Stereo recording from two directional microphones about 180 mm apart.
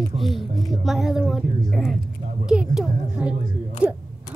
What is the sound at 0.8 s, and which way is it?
Speech, centre (ahead or behind).